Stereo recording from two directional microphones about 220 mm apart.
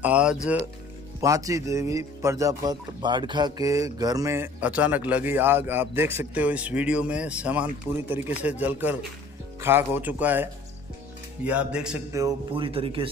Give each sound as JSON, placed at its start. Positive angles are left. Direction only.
{"t": 0.0, "sound": "a man's voice", "side_deg": -5}
{"t": 1.2, "sound": "a man's voice", "side_deg": -15}
{"t": 12.2, "sound": "speech", "side_deg": -20}